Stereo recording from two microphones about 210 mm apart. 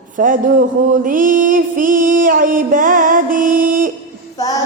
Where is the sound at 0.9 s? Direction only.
40° right (ahead or behind).